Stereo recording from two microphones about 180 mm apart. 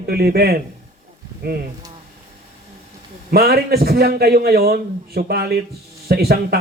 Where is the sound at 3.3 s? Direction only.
60° right (ahead or behind).